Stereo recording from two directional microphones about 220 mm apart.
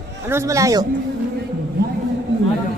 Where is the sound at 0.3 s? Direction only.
15° right (ahead or behind).